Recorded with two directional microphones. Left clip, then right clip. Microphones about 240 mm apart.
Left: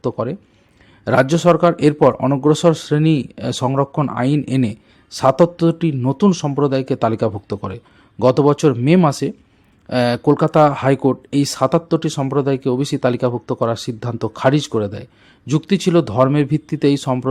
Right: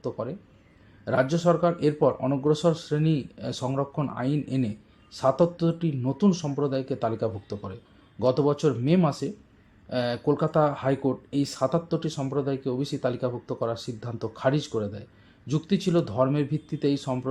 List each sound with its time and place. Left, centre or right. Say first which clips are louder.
0.0 s a man's voice: left 10 dB; left
9.1 s speech: left 10 dB; centre
9.9 s a man's voice: left 10 dB; left